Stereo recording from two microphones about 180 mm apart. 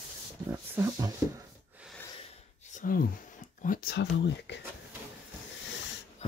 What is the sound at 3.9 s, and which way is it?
Speech, 70° left (ahead or behind).